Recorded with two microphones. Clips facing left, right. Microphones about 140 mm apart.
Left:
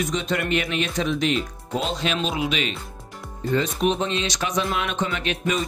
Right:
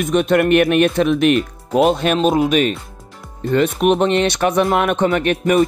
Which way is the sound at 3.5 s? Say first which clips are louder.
Right 7 dB; 65° right (ahead or behind).